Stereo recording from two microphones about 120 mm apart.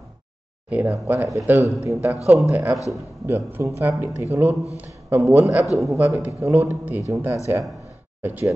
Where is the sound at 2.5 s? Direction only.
15° right (ahead or behind).